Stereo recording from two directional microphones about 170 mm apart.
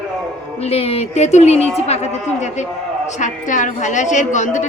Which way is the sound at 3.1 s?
45° left (ahead or behind).